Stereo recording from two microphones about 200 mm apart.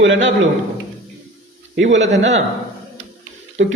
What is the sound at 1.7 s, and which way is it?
Speech, 65° right (ahead or behind).